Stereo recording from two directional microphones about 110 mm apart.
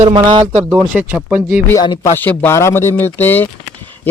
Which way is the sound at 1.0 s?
20° right (ahead or behind).